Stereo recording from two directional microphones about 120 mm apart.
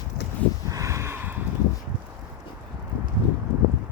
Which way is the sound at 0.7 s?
25° right (ahead or behind).